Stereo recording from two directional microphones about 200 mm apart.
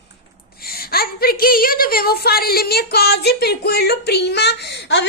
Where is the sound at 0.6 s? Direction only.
50° left (ahead or behind).